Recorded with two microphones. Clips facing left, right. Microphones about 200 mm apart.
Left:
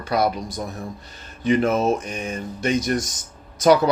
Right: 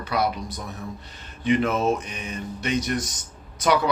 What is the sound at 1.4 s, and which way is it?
Speech, 45° left (ahead or behind).